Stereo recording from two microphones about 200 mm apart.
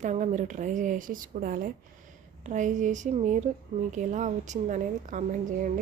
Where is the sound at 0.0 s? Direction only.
35° right (ahead or behind).